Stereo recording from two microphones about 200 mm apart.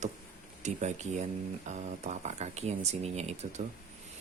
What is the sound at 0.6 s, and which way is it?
Speech, 35° right (ahead or behind).